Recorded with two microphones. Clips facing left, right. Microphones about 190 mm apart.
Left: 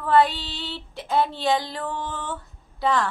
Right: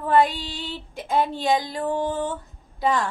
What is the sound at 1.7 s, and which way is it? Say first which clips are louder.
Music: right 6 dB; 45° right (ahead or behind).